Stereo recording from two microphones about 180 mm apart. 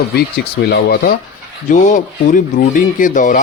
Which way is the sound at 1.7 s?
45° left (ahead or behind).